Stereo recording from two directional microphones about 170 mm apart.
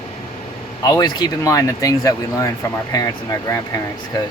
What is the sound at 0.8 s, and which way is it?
Speech, 25° left (ahead or behind).